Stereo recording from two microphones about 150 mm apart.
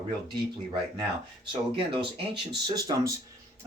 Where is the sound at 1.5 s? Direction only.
35° right (ahead or behind).